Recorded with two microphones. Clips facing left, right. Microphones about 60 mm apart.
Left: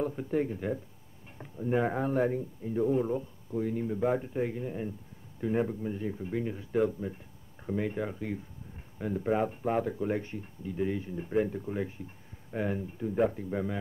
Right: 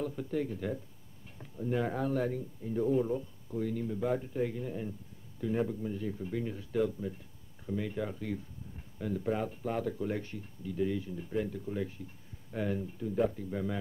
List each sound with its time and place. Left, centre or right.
0.0 s speech: left